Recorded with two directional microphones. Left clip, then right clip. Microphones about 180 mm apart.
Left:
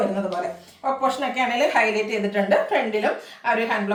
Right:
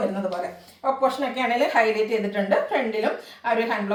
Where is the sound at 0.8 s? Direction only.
15° left (ahead or behind).